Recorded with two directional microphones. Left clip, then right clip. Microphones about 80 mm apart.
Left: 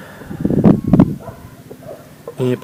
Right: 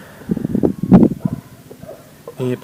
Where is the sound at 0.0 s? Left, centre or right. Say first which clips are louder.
Left 3 dB; centre.